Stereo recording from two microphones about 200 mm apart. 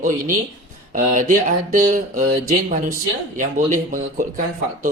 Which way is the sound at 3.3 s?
40° right (ahead or behind).